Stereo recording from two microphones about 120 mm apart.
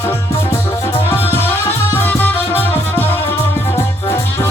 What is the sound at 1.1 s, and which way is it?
Music, 15° left (ahead or behind).